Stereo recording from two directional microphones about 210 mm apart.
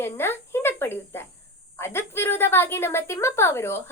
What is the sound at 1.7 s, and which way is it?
A woman's voice, 10° left (ahead or behind).